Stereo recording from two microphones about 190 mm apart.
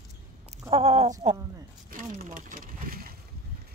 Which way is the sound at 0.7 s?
35° right (ahead or behind).